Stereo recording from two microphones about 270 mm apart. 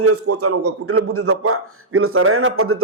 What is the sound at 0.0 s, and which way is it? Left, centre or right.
A man's voice, right.